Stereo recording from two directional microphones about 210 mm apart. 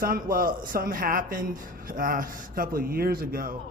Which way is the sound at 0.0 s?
45° right (ahead or behind).